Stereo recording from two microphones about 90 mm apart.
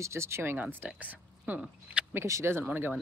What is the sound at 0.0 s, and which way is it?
Speech, 30° right (ahead or behind).